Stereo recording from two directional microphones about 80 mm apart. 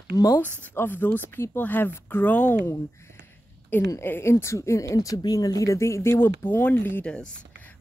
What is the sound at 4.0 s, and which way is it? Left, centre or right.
Speech, left.